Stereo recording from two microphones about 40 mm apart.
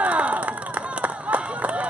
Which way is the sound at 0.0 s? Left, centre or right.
Right.